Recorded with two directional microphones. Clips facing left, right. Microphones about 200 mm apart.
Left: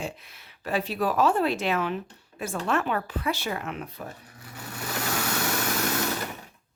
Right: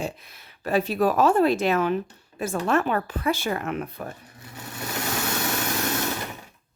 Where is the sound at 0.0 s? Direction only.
40° right (ahead or behind).